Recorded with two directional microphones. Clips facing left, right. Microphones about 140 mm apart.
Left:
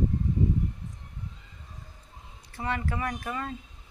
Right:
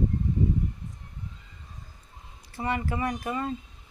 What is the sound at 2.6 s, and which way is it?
Speech, 10° right (ahead or behind).